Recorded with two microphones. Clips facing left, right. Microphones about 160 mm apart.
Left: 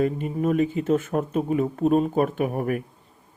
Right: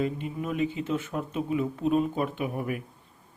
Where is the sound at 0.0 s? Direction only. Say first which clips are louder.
Left 7 dB; 45° left (ahead or behind).